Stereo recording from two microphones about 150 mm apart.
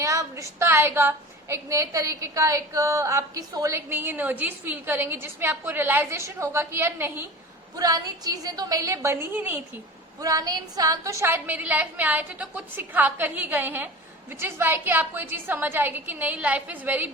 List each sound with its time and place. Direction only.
0.0 s a woman's voice: 20° right (ahead or behind)